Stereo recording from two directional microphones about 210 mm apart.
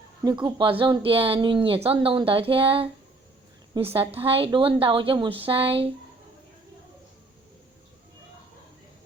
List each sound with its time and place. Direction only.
0.4 s speech: 25° right (ahead or behind)